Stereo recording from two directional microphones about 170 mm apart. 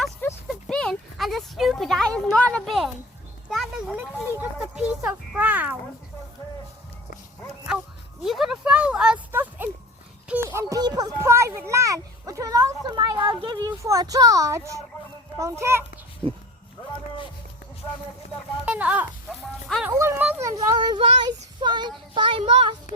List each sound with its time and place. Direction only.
0.4 s a sound: 5° left (ahead or behind)
4.4 s a child's voice: 5° right (ahead or behind)
8.2 s a child's voice: centre (ahead or behind)
16.2 s speech: 30° right (ahead or behind)
18.6 s speech: 10° right (ahead or behind)
19.6 s music: centre (ahead or behind)
20.0 s a sound: 15° right (ahead or behind)
20.5 s child singing: 20° right (ahead or behind)